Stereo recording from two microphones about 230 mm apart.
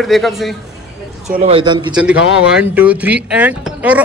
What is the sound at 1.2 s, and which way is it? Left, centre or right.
Speech, right.